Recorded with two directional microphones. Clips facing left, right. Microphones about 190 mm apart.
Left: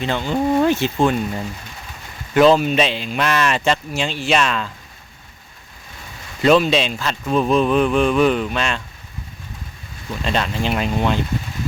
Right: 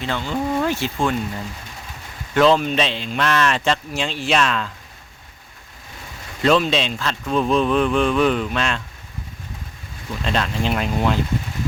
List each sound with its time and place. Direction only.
0.0 s speech: 20° left (ahead or behind)
2.3 s speech: 10° left (ahead or behind)
6.4 s speech: 5° left (ahead or behind)
10.2 s speech: centre (ahead or behind)